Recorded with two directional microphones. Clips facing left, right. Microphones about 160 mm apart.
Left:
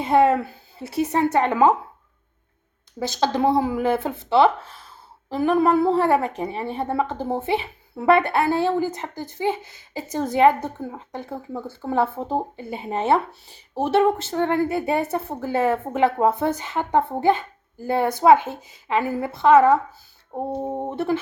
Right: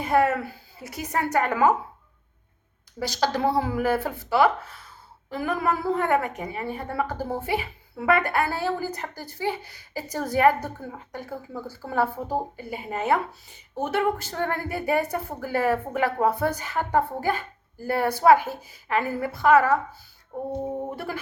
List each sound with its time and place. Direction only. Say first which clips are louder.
0.0 s a woman's voice: left 4 dB; 25° left (ahead or behind)
3.0 s a woman's voice: left 3 dB; 20° left (ahead or behind)